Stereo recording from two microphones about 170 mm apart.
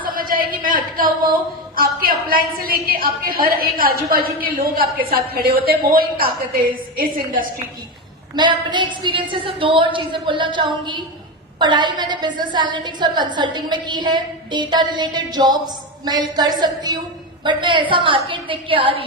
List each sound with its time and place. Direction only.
0.0 s a woman's voice: 55° right (ahead or behind)
8.4 s a woman's voice: 25° right (ahead or behind)